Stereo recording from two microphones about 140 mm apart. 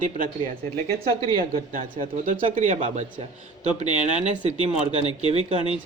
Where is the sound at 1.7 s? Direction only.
75° right (ahead or behind).